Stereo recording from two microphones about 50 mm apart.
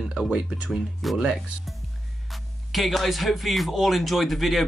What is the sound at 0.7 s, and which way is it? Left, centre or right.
Speech, centre.